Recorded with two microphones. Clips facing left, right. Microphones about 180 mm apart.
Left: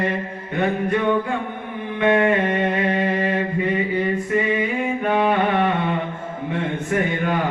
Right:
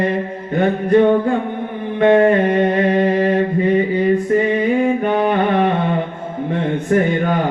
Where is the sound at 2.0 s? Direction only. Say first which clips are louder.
Right 6 dB; 35° right (ahead or behind).